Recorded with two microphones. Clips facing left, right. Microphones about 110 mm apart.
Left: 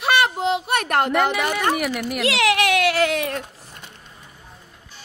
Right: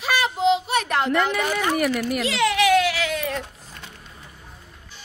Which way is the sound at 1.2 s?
65° left (ahead or behind).